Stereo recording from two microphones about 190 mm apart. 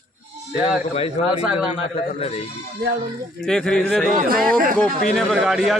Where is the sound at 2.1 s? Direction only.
30° left (ahead or behind).